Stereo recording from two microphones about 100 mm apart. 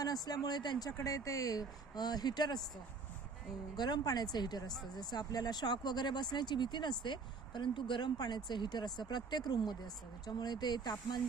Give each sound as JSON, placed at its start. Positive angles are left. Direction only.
{"t": 0.0, "sound": "speech", "side_deg": 40}
{"t": 0.9, "sound": "speech", "side_deg": 35}
{"t": 3.8, "sound": "speech", "side_deg": 45}